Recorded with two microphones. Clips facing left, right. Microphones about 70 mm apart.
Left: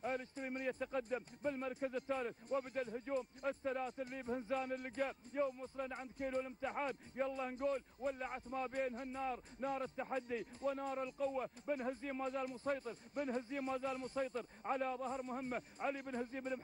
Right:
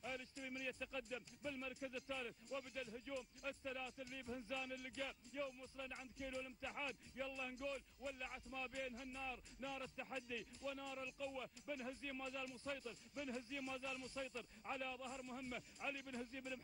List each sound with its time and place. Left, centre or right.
0.0 s speech: left